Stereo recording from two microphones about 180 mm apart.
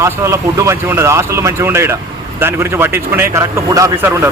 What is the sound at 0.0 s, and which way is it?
A man's voice, 15° right (ahead or behind).